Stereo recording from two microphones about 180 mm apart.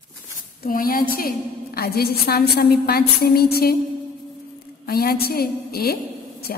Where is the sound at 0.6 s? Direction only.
55° left (ahead or behind).